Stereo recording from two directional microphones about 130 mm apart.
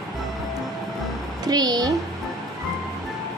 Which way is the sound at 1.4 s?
30° right (ahead or behind).